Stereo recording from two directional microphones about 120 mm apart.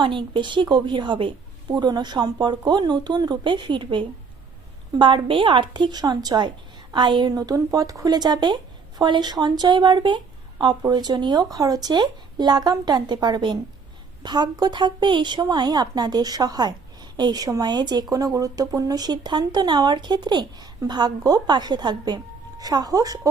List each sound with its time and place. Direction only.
0.0 s speech: 40° right (ahead or behind)